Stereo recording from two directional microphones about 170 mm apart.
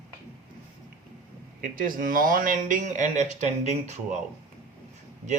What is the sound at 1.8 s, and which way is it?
Speech, 55° right (ahead or behind).